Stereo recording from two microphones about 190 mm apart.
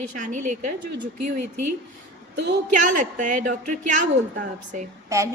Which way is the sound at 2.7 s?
40° right (ahead or behind).